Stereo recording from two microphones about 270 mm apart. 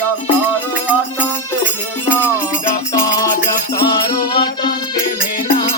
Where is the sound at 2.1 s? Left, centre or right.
Centre.